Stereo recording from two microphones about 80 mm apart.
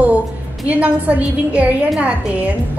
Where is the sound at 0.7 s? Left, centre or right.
Centre.